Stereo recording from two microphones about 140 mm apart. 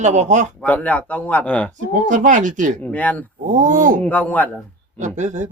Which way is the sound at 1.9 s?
65° right (ahead or behind).